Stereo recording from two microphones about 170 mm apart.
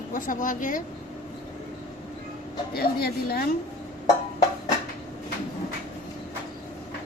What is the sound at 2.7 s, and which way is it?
Speech, 65° left (ahead or behind).